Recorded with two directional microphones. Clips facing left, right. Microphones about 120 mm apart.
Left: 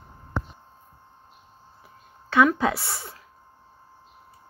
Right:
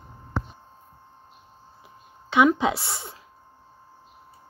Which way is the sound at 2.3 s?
20° right (ahead or behind).